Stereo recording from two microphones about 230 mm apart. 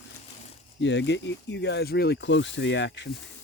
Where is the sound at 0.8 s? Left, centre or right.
Left.